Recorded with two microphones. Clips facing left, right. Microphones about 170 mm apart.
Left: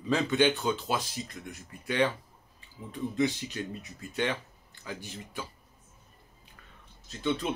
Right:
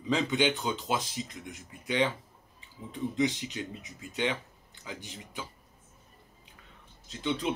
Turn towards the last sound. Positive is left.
turn(degrees=-20)  # may be behind; listen again after turning